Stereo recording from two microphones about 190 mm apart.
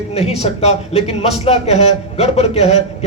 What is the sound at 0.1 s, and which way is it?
A man's voice, 35° left (ahead or behind).